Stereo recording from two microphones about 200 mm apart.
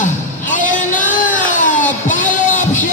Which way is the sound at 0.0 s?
40° left (ahead or behind).